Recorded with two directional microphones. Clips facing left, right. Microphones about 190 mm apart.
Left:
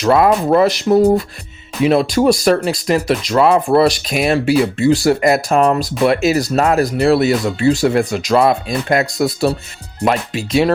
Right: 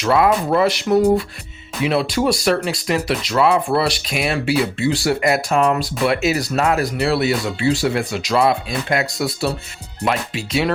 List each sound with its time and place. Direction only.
0.0 s speech: 40° left (ahead or behind)